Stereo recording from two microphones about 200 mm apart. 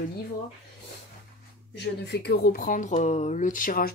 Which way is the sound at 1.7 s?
60° left (ahead or behind).